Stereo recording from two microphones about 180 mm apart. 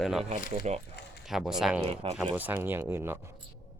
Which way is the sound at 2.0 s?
30° right (ahead or behind).